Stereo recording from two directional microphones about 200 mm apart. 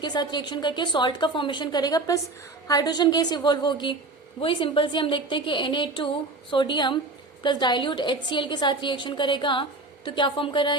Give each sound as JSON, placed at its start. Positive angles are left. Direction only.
{"t": 0.0, "sound": "a woman's voice", "side_deg": 20}